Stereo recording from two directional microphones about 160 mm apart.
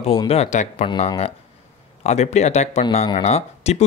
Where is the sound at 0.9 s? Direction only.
35° left (ahead or behind).